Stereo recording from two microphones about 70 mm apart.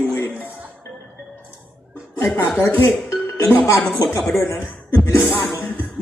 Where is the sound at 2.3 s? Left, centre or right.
Left.